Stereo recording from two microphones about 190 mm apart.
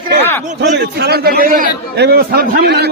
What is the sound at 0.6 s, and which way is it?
A man's voice, 60° right (ahead or behind).